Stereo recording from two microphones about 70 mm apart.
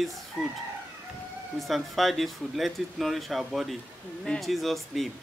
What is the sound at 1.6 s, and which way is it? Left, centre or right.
Speech, centre.